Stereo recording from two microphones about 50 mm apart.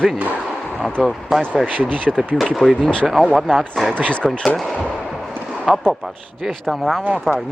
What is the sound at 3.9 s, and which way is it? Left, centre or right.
Speech, left.